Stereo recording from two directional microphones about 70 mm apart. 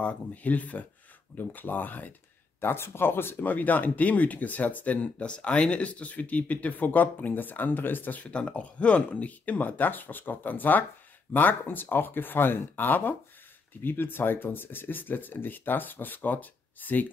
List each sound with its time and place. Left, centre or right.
0.0 s speech: left